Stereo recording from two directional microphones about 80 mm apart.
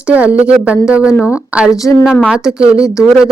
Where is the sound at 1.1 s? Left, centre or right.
Left.